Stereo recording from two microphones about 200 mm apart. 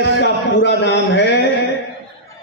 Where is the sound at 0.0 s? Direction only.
60° left (ahead or behind).